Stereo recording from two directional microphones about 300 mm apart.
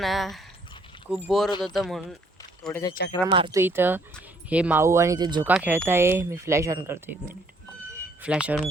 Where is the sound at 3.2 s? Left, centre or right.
Centre.